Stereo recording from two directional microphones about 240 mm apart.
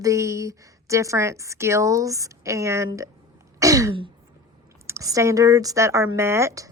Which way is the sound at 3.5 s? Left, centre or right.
Centre.